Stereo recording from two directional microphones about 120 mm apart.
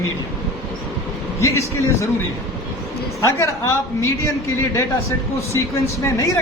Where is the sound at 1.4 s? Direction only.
25° left (ahead or behind).